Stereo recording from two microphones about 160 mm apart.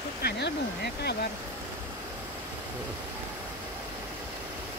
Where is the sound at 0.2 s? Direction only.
90° left.